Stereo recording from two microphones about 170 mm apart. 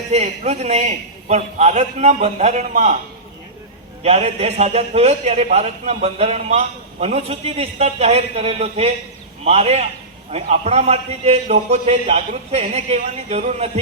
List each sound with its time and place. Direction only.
0.1 s a man's voice: 40° right (ahead or behind)
4.0 s a man's voice: 35° right (ahead or behind)